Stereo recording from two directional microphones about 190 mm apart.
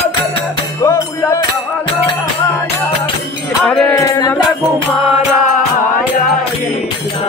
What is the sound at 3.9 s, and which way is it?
Music, 20° left (ahead or behind).